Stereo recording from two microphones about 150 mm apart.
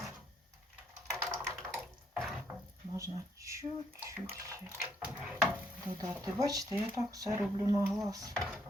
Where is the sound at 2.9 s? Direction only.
20° right (ahead or behind).